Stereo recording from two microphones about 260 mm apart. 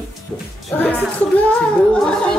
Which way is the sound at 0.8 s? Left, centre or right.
Centre.